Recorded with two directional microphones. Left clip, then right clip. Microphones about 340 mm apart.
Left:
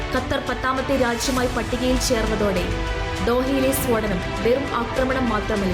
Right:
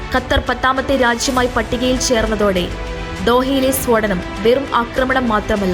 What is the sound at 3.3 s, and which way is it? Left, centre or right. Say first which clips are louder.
Speech: right 8 dB; centre.